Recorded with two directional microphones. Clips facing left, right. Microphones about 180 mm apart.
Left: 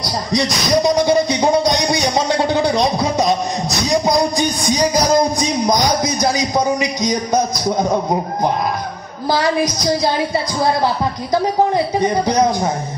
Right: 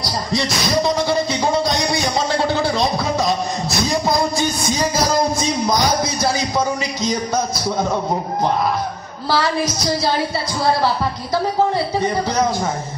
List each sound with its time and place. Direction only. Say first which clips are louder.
0.0 s music: left 3 dB; 15° left (ahead or behind)
9.3 s a woman's voice: left 2 dB; 15° left (ahead or behind)